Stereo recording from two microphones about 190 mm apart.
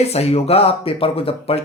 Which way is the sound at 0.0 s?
35° left (ahead or behind).